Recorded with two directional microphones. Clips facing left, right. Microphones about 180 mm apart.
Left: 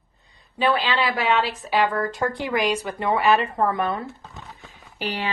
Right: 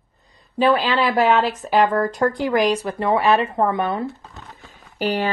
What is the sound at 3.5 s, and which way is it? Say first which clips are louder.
Speech: right 3 dB; 25° right (ahead or behind).